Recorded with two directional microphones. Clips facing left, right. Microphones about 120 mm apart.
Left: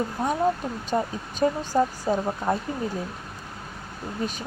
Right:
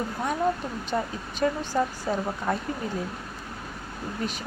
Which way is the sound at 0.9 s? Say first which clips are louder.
Left 3 dB; 20° left (ahead or behind).